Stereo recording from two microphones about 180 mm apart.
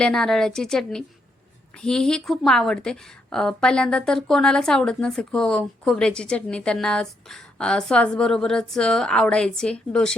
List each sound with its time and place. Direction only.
0.0 s a woman's voice: 5° left (ahead or behind)